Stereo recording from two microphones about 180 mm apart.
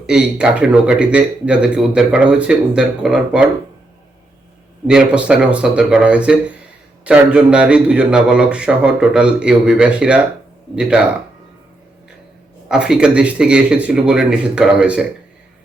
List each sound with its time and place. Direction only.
0.0 s a man's voice: 5° right (ahead or behind)
4.9 s a man's voice: 5° right (ahead or behind)
12.6 s a man's voice: 5° right (ahead or behind)